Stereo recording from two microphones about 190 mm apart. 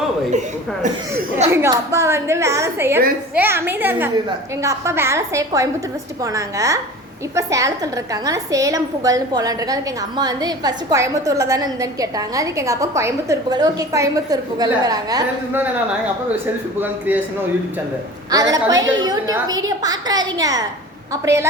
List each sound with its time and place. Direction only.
1.5 s a woman's voice: 15° right (ahead or behind)
18.5 s a woman's voice: 20° right (ahead or behind)